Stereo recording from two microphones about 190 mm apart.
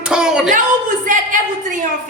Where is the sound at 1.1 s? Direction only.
45° right (ahead or behind).